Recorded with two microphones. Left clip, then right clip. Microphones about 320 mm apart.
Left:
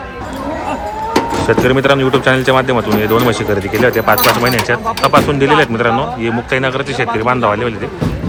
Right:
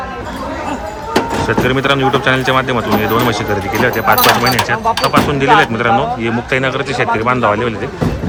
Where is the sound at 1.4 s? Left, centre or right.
Centre.